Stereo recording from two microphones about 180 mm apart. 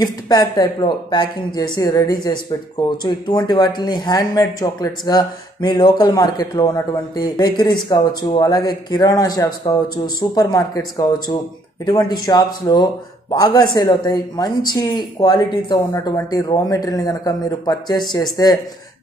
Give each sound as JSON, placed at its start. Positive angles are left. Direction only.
{"t": 0.0, "sound": "speech", "side_deg": 20}
{"t": 11.8, "sound": "speech", "side_deg": 25}